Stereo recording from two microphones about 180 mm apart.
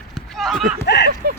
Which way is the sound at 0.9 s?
70° left (ahead or behind).